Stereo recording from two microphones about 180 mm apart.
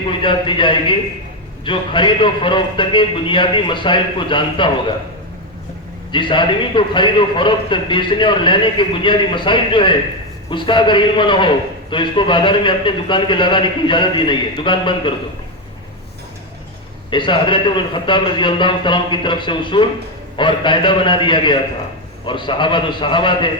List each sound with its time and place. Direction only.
0.1 s a man's voice: 25° left (ahead or behind)
6.1 s a man's voice: 25° left (ahead or behind)
17.1 s a man's voice: 25° left (ahead or behind)